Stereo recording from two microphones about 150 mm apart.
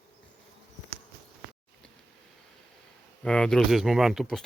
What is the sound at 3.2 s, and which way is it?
Speech, 5° left (ahead or behind).